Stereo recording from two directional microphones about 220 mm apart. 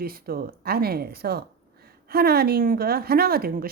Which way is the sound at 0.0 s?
45° right (ahead or behind).